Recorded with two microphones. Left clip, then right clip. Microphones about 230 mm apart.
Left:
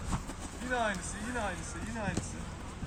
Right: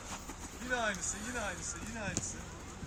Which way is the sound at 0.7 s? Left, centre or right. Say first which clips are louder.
Left 2 dB; right.